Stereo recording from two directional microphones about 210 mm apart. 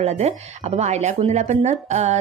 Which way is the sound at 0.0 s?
30° right (ahead or behind).